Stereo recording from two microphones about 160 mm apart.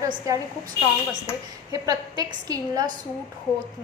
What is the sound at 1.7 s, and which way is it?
A woman's voice, 20° right (ahead or behind).